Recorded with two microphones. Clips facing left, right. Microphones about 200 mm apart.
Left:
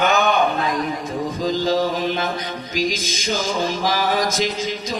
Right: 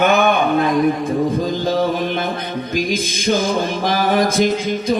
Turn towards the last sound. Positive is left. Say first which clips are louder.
# right 7 dB
turn(degrees=-55)  # may be behind; listen again after turning